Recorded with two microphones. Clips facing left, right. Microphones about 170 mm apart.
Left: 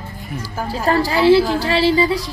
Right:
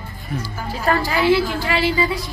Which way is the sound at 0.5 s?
35° left (ahead or behind).